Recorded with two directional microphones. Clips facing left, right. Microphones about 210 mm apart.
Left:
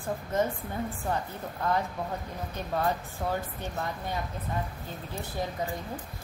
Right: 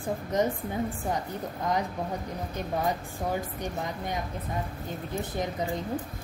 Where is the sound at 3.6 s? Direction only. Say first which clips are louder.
Right 2 dB; 15° right (ahead or behind).